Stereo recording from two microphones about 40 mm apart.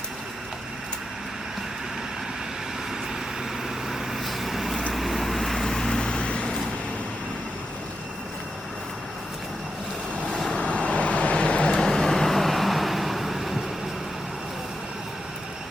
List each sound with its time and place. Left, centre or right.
3.8 s vehicle: centre
5.9 s vehicle: left
10.5 s vehicle: left
11.7 s vehicle: centre